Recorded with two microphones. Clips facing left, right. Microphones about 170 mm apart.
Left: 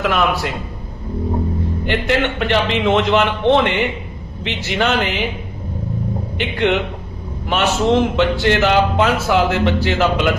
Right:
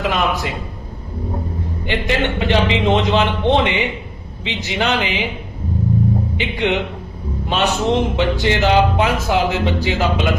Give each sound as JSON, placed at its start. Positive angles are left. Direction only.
{"t": 0.0, "sound": "a man's voice", "side_deg": -15}
{"t": 1.9, "sound": "a man's voice", "side_deg": -15}
{"t": 6.3, "sound": "a man's voice", "side_deg": -15}